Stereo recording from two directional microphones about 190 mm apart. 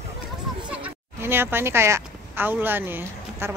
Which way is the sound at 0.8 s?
10° right (ahead or behind).